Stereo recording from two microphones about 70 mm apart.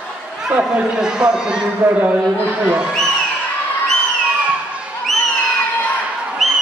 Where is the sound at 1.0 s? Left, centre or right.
Centre.